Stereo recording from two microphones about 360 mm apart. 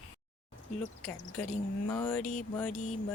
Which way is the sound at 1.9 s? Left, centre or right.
Centre.